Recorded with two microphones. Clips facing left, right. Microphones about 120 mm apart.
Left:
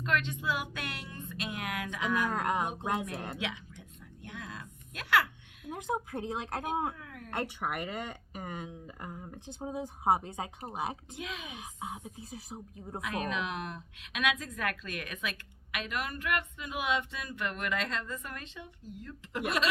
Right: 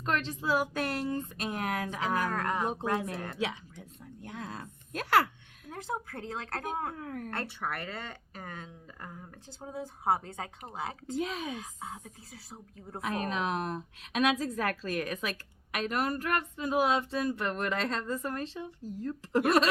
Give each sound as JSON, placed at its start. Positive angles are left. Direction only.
{"t": 0.0, "sound": "a woman's voice", "side_deg": -35}
{"t": 2.3, "sound": "speech", "side_deg": 20}
{"t": 3.3, "sound": "a sound", "side_deg": -35}
{"t": 5.6, "sound": "speech", "side_deg": 15}
{"t": 6.9, "sound": "a woman's voice", "side_deg": -40}
{"t": 7.3, "sound": "speech", "side_deg": 15}
{"t": 11.2, "sound": "a woman's voice", "side_deg": -40}
{"t": 11.4, "sound": "speech", "side_deg": 15}
{"t": 13.0, "sound": "a woman's voice", "side_deg": -35}